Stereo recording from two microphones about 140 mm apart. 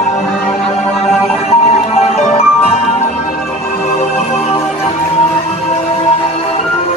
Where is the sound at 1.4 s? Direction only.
50° left (ahead or behind).